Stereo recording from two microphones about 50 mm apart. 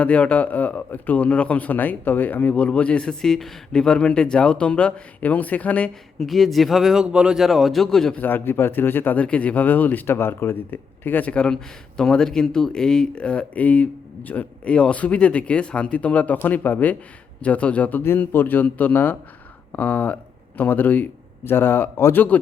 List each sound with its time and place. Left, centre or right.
0.0 s a man's voice: left
6.1 s speech: centre
7.4 s speech: centre
8.1 s speech: left
9.1 s speech: left
10.2 s speech: left
11.3 s a man's voice: left
18.2 s speech: left
21.4 s speech: left
22.1 s speech: left